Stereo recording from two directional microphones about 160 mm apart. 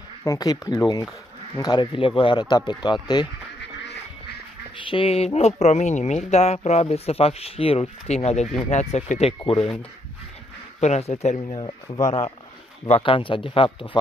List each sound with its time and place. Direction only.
0.2 s speech: 20° left (ahead or behind)
4.8 s speech: 35° left (ahead or behind)
9.6 s speech: 10° left (ahead or behind)
10.8 s speech: 45° left (ahead or behind)